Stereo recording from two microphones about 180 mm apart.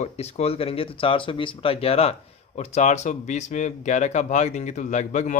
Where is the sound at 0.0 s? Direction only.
35° left (ahead or behind).